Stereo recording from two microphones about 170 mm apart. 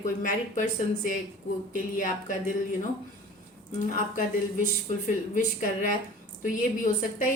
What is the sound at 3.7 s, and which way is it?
A woman's voice, 50° left (ahead or behind).